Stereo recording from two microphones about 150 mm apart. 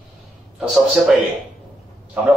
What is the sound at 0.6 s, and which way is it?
Speech, centre (ahead or behind).